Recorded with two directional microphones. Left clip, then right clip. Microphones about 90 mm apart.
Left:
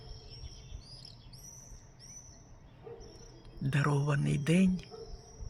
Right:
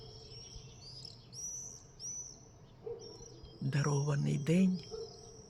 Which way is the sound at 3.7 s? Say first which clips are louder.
Left 4 dB; 30° left (ahead or behind).